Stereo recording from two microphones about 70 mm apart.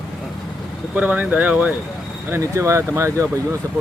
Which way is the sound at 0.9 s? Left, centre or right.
Right.